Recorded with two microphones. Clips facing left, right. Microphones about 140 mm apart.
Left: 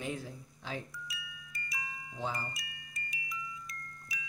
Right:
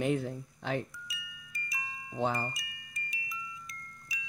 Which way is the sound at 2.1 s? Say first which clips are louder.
Right 7 dB; 60° right (ahead or behind).